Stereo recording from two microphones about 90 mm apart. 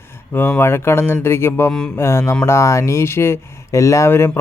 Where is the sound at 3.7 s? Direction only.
35° left (ahead or behind).